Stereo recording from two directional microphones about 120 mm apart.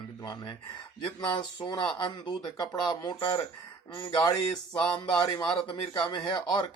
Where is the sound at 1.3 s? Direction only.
40° left (ahead or behind).